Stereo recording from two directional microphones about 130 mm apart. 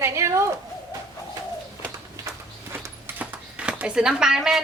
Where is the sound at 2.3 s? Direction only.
20° right (ahead or behind); by 4.6 s 5° right (ahead or behind).